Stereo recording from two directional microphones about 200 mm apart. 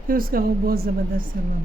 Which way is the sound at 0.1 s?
45° right (ahead or behind).